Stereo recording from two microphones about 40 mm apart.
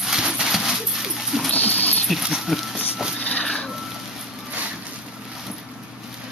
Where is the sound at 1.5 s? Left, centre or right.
Left.